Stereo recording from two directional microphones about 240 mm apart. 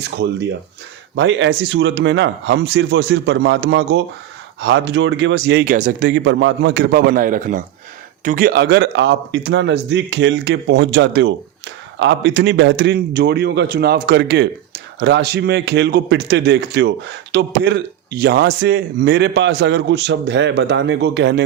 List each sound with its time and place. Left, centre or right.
0.2 s speech: right
5.6 s speech: right
6.1 s speech: right